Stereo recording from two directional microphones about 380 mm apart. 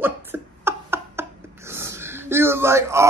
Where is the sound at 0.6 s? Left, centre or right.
Centre.